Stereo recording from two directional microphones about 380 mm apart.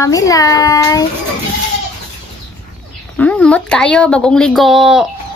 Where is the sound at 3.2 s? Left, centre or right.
Centre.